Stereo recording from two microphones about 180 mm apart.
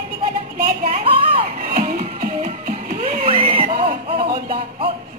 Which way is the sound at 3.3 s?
50° right (ahead or behind).